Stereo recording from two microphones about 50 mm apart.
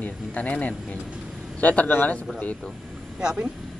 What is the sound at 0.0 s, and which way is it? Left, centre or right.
Speech, left.